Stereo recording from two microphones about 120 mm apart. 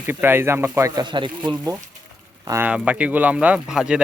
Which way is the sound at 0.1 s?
20° right (ahead or behind).